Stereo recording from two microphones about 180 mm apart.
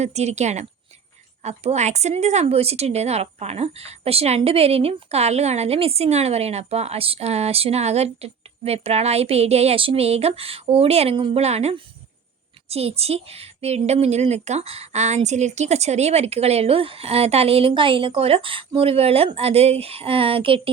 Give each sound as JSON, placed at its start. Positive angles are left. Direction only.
{"t": 0.0, "sound": "speech", "side_deg": -35}